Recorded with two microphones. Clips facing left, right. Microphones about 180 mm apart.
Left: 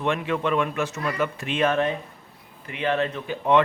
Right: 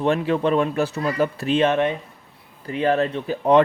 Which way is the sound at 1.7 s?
20° right (ahead or behind).